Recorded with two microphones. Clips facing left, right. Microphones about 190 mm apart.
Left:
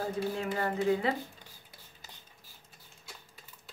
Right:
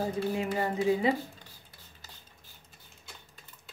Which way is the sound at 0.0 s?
15° right (ahead or behind).